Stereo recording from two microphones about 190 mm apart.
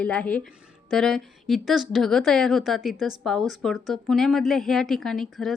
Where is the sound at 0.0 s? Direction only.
5° left (ahead or behind).